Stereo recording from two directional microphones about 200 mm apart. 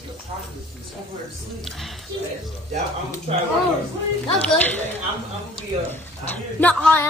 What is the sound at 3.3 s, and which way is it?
Speech, 30° right (ahead or behind).